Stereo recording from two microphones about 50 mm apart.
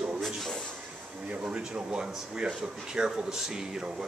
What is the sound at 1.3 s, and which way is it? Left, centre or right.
A man's voice, right.